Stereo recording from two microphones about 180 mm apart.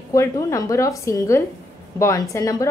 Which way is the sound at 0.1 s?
15° left (ahead or behind).